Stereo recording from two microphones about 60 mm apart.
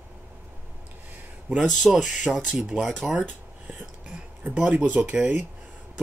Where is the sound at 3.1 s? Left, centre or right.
Right.